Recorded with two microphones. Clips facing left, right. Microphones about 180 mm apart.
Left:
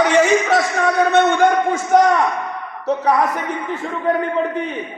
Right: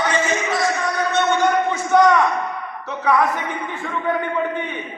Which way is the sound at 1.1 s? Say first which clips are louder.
Left 1 dB; 55° left (ahead or behind).